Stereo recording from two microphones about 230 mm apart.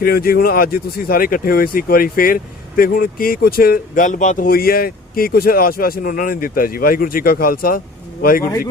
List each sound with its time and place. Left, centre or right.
0.0 s speech: left